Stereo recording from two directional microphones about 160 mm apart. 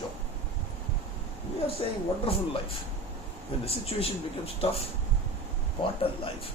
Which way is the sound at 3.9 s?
35° left (ahead or behind).